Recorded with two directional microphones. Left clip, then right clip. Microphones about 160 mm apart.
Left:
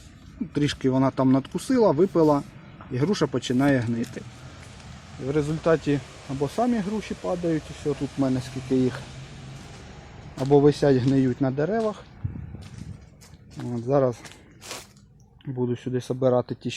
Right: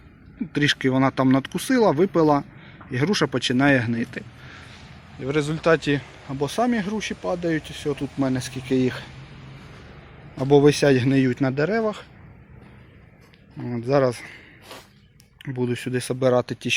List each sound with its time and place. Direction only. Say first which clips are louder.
0.5 s speech: right 3 dB; 5° right (ahead or behind)
5.2 s speech: right 2 dB; 10° right (ahead or behind)
10.6 s speech: right 2 dB; 10° right (ahead or behind)
13.7 s speech: right 2 dB; 15° right (ahead or behind)
13.9 s speech: right 2 dB; 5° right (ahead or behind)
15.4 s speech: right 2 dB; 10° right (ahead or behind)